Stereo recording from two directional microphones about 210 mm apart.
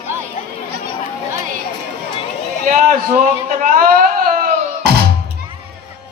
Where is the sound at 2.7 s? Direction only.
35° right (ahead or behind).